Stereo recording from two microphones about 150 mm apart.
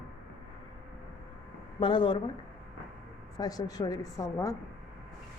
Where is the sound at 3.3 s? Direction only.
25° left (ahead or behind).